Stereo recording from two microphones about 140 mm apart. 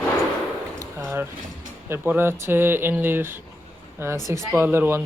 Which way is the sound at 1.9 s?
15° right (ahead or behind).